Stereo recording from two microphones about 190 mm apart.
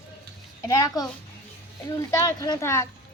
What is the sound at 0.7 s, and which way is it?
A woman's voice, 20° left (ahead or behind).